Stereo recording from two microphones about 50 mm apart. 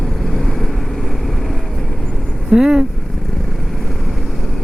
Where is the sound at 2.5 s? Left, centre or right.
Centre.